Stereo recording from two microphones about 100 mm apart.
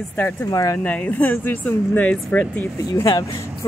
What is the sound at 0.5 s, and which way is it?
Speech, 35° left (ahead or behind).